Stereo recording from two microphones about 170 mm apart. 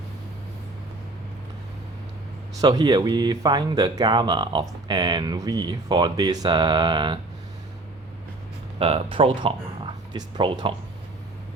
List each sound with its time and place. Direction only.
2.6 s speech: 25° right (ahead or behind)
8.8 s speech: 35° right (ahead or behind)